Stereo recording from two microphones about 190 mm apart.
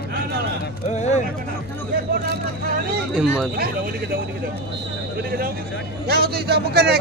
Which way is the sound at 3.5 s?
50° right (ahead or behind).